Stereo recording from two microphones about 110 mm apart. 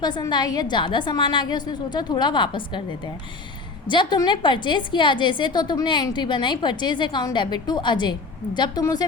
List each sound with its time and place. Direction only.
0.0 s a woman's voice: 40° left (ahead or behind)
3.8 s a woman's voice: 45° left (ahead or behind)